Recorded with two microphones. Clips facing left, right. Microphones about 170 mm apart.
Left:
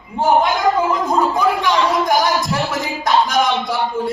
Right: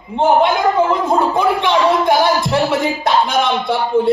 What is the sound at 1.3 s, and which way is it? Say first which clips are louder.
Speech: right 2 dB; 25° right (ahead or behind).